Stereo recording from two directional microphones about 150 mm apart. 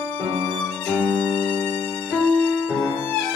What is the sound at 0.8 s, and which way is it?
Violin, 15° left (ahead or behind).